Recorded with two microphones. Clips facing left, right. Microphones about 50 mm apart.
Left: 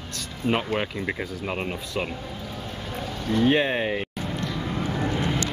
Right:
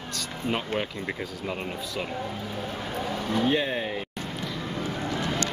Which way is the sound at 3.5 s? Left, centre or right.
Left.